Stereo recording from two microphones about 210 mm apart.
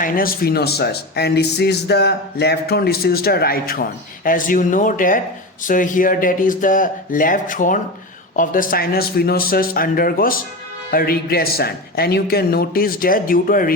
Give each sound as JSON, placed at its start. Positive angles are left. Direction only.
{"t": 0.0, "sound": "a man's voice", "side_deg": 45}